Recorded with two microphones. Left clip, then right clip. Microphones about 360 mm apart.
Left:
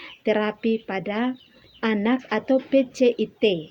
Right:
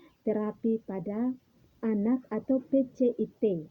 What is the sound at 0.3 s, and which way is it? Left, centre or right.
Speech, right.